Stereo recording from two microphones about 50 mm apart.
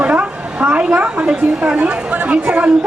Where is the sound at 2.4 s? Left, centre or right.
Right.